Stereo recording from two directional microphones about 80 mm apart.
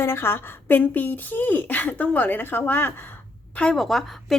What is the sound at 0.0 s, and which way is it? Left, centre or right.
A woman's voice, left.